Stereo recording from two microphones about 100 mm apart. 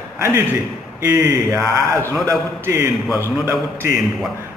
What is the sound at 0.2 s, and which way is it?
A man's voice, 25° right (ahead or behind).